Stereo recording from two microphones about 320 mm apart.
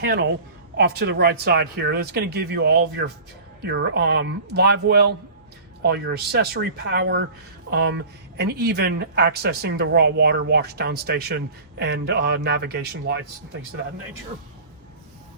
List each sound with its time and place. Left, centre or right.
0.0 s speech: right